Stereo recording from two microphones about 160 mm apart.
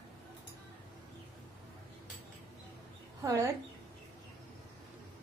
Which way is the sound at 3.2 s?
20° right (ahead or behind).